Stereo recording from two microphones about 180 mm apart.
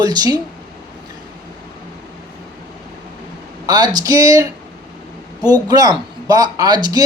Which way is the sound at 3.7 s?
20° right (ahead or behind).